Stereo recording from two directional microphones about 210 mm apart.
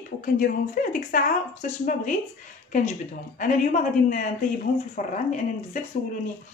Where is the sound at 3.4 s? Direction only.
40° left (ahead or behind).